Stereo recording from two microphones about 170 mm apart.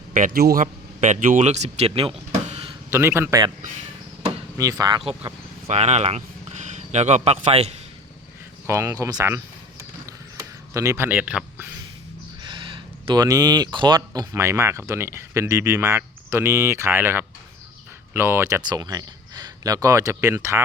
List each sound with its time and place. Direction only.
0.1 s speech: 60° right (ahead or behind); by 2.7 s 35° right (ahead or behind)
2.9 s speech: 15° right (ahead or behind)
4.5 s speech: 20° right (ahead or behind); by 7.7 s 35° right (ahead or behind)
8.6 s speech: 15° right (ahead or behind)
10.1 s a sound: 20° right (ahead or behind)
12.4 s speech: 30° right (ahead or behind)